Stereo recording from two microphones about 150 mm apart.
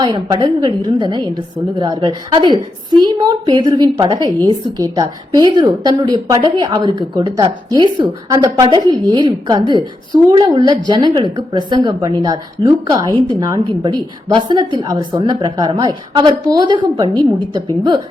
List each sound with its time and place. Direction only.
0.0 s a woman's voice: 30° right (ahead or behind)